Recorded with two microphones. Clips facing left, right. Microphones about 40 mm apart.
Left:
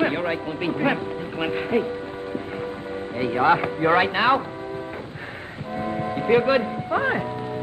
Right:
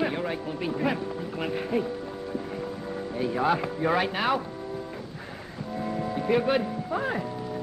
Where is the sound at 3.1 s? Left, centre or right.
Left.